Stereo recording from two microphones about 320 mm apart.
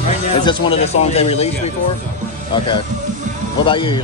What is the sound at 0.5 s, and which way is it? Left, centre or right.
Speech, centre.